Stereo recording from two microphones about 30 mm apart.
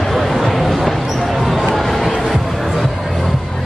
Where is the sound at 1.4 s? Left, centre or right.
Centre.